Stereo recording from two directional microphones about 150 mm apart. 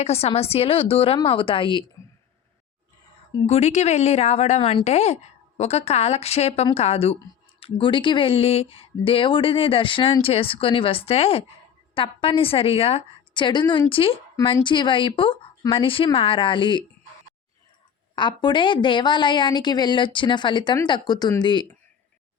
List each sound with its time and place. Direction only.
0.0 s a woman's voice: 45° left (ahead or behind)
3.4 s a woman's voice: 45° left (ahead or behind)
18.1 s a woman's voice: 30° left (ahead or behind)